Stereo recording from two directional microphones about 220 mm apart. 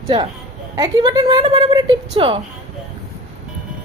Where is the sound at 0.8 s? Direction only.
20° right (ahead or behind).